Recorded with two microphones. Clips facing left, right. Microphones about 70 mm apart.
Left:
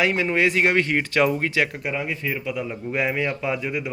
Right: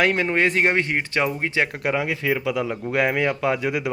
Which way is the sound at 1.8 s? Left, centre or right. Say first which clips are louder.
Right 4 dB; right.